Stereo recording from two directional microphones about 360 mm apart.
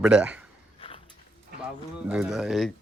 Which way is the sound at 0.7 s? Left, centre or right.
Centre.